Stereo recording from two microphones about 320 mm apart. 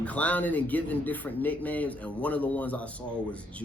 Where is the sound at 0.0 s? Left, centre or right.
Centre.